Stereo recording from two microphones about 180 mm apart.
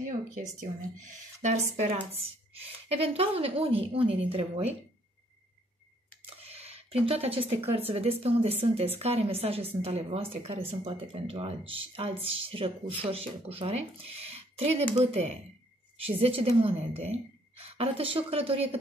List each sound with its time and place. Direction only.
0.0 s speech: 45° right (ahead or behind)
6.2 s a sound: 35° right (ahead or behind)
7.7 s speech: 35° right (ahead or behind)